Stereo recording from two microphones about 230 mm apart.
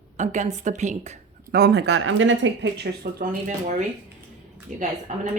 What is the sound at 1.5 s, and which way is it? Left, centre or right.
Speech, right.